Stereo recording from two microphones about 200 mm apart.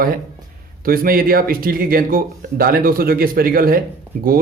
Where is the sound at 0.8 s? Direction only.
45° right (ahead or behind).